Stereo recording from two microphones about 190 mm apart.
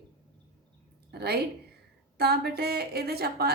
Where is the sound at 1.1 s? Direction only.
55° right (ahead or behind).